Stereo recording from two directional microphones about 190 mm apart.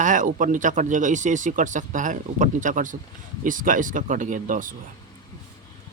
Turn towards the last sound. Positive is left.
turn(degrees=-45)  # may be behind; listen again after turning